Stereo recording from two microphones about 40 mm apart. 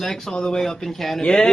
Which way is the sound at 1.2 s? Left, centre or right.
Centre.